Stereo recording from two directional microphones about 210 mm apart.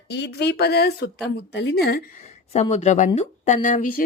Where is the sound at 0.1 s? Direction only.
55° left (ahead or behind).